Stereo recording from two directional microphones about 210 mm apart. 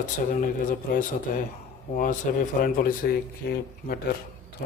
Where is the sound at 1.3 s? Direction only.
40° left (ahead or behind).